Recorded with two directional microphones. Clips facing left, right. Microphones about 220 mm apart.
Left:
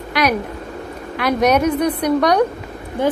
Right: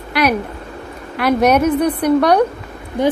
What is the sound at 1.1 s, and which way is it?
A woman's voice, 10° right (ahead or behind).